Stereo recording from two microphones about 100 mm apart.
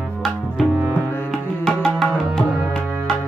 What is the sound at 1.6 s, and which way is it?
Music, centre (ahead or behind).